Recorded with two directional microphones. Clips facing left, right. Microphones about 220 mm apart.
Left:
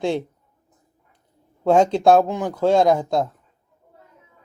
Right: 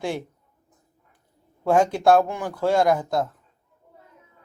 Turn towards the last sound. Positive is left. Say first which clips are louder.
# left 3 dB
turn(degrees=20)  # may be behind; listen again after turning